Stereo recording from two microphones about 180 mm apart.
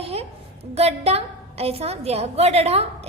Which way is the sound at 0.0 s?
35° right (ahead or behind).